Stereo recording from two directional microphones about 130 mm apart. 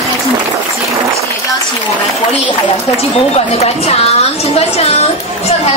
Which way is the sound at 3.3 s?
55° left (ahead or behind).